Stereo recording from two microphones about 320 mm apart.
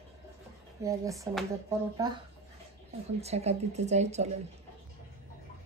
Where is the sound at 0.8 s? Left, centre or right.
Centre.